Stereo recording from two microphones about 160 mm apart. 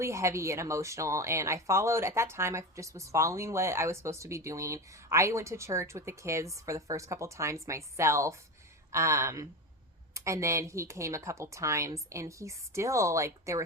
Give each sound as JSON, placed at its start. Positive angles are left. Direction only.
{"t": 0.0, "sound": "a woman's voice", "side_deg": -20}